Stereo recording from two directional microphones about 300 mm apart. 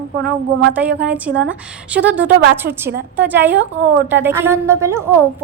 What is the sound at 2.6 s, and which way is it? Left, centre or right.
Speech, right.